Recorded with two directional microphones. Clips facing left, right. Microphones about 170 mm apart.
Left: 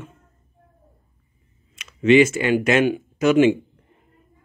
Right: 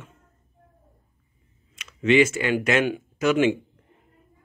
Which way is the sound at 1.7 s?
20° left (ahead or behind).